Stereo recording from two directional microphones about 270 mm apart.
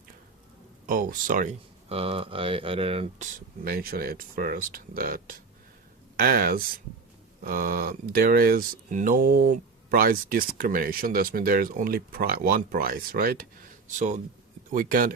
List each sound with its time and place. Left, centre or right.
0.9 s speech: right
3.6 s speech: right